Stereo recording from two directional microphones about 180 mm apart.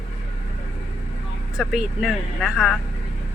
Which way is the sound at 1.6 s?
Centre (ahead or behind).